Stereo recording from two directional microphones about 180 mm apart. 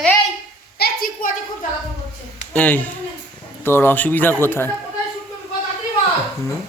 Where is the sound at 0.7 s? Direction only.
55° left (ahead or behind).